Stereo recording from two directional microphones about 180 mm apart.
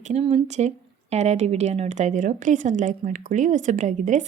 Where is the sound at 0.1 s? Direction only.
35° right (ahead or behind).